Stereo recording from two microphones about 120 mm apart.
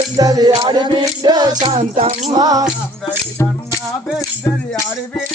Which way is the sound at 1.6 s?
50° right (ahead or behind).